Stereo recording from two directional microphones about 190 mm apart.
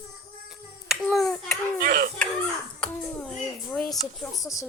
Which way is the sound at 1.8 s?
50° right (ahead or behind).